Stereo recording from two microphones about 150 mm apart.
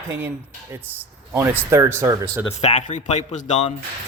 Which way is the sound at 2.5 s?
50° left (ahead or behind).